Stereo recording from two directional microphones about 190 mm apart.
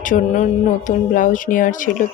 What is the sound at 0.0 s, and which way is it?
Speech, 40° left (ahead or behind).